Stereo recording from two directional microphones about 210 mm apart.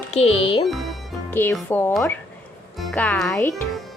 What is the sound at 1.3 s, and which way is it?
Speech, 10° left (ahead or behind).